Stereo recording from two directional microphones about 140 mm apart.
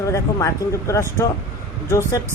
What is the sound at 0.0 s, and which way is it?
Speech, 20° left (ahead or behind).